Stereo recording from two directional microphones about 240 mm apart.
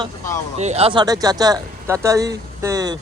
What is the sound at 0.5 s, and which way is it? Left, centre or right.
Speech, right.